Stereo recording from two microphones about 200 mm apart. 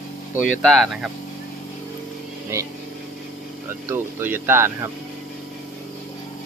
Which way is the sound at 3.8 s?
10° right (ahead or behind).